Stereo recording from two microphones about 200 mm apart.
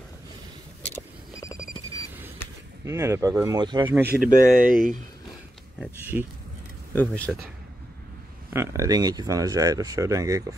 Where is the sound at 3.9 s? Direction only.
10° right (ahead or behind).